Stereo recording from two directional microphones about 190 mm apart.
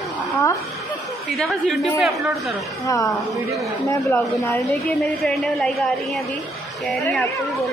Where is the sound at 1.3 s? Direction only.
Centre (ahead or behind).